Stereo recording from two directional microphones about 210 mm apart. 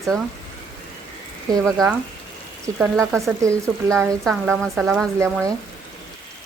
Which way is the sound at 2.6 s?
10° right (ahead or behind).